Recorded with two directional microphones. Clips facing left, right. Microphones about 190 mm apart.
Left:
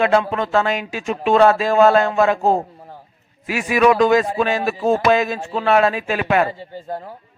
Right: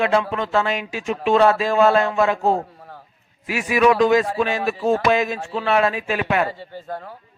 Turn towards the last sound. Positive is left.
turn(degrees=45)  # may be behind; listen again after turning